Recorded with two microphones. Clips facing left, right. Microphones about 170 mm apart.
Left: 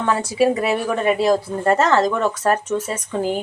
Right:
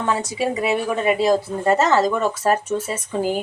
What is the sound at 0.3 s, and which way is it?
A woman's voice, centre (ahead or behind).